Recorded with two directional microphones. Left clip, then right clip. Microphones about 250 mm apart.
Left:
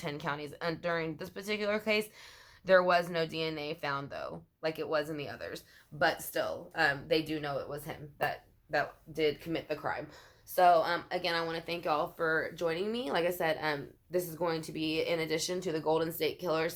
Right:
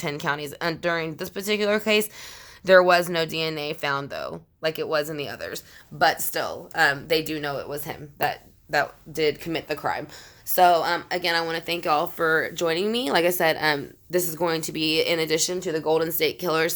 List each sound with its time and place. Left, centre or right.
0.0 s speech: right